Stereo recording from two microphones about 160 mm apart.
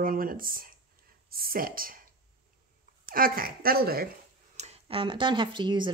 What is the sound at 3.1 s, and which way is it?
Speech, 65° right (ahead or behind).